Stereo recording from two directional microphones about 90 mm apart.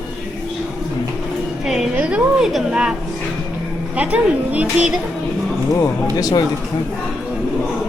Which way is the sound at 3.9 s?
15° right (ahead or behind).